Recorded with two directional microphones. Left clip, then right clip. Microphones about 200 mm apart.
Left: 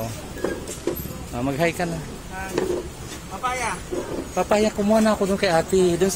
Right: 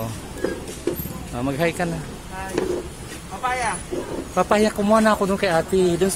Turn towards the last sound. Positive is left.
turn(degrees=0)  # may be behind; listen again after turning